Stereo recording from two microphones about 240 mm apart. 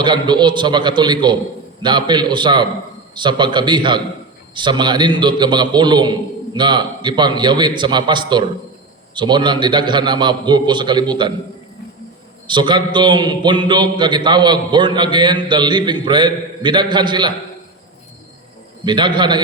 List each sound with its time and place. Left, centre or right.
0.0 s a man's voice: centre
12.5 s a man's voice: centre
18.9 s a man's voice: centre